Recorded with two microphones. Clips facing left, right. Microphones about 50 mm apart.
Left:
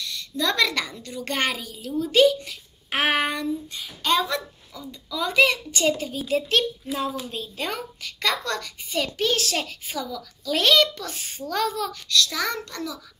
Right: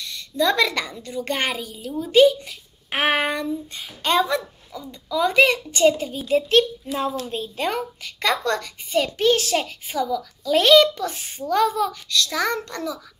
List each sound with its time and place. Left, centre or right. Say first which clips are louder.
0.0 s a woman's voice: right 5 dB; right
3.7 s a child's voice: right 3 dB; right; by 6.4 s centre
7.2 s a woman's voice: right 5 dB; right